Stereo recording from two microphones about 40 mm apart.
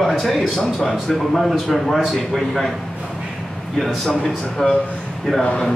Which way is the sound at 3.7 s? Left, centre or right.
Centre.